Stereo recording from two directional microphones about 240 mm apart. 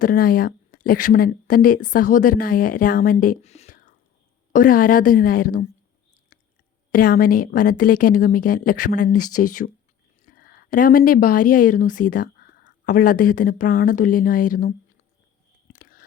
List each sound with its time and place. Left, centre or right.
0.0 s speech: left
6.9 s speech: left
15.6 s biting: left